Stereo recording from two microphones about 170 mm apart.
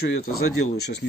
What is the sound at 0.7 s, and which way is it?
Speech, 75° left (ahead or behind).